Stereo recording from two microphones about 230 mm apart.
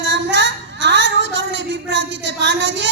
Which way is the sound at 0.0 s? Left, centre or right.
Right.